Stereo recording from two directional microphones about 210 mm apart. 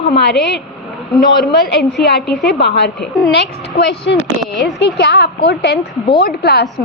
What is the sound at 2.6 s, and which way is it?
A woman's voice, 55° left (ahead or behind).